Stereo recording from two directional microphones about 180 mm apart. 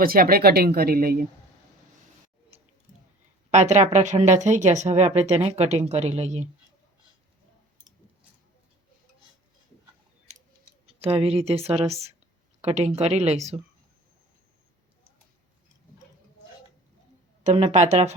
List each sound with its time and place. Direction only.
0.0 s speech: 55° right (ahead or behind)
3.5 s speech: 40° right (ahead or behind)
10.8 s speech: 30° right (ahead or behind)
17.4 s speech: 40° right (ahead or behind)